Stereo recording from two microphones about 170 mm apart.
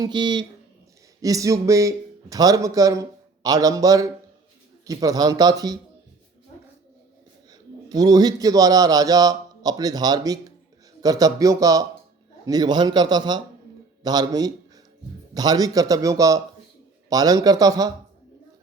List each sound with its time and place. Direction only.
0.0 s a man's voice: 25° right (ahead or behind)
7.9 s a man's voice: 25° right (ahead or behind)